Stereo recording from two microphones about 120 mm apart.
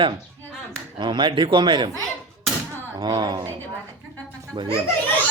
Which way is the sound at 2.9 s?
35° right (ahead or behind).